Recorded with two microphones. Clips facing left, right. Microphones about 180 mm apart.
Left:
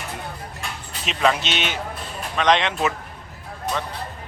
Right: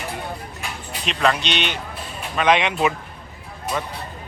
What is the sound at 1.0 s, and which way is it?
Speech, 5° left (ahead or behind).